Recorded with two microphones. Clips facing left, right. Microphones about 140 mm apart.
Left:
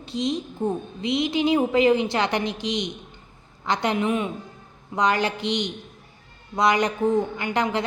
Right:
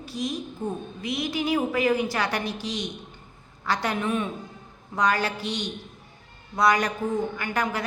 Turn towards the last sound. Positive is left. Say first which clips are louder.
# left 3 dB
turn(degrees=20)  # may be behind; listen again after turning